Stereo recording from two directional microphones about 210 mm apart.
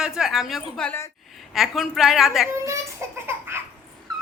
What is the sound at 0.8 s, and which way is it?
Speech, 10° left (ahead or behind).